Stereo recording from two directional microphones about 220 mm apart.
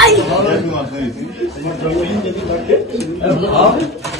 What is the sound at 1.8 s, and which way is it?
Speech, centre (ahead or behind).